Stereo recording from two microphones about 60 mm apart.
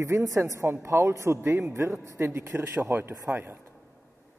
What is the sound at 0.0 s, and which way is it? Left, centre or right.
A woman's voice, right.